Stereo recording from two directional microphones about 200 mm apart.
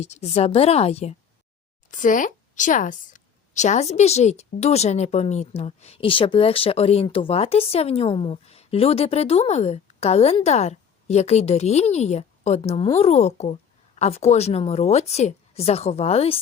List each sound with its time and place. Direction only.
0.0 s a woman's voice: 35° left (ahead or behind)